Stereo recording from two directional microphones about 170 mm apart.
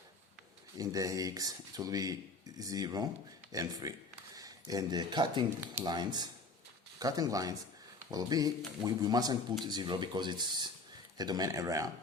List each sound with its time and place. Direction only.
0.8 s speech: 20° right (ahead or behind)